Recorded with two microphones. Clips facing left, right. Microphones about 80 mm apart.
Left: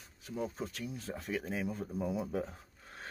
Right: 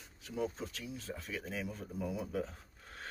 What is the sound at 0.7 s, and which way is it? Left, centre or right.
Speech, left.